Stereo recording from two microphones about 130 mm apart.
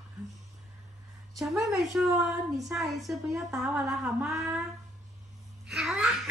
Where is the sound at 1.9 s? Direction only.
Centre (ahead or behind).